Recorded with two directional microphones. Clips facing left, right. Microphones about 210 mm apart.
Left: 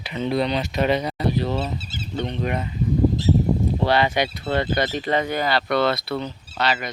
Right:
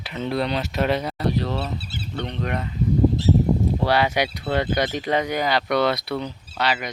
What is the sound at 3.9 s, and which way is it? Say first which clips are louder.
Speech: left 1 dB; 10° right (ahead or behind).